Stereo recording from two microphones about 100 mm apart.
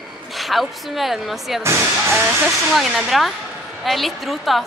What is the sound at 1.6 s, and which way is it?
Speech, 25° right (ahead or behind).